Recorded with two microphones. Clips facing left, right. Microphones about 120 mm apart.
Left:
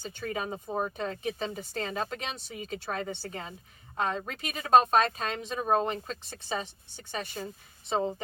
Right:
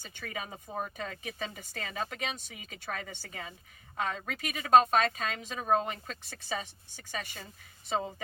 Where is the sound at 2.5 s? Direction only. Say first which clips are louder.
Left 5 dB; 40° left (ahead or behind).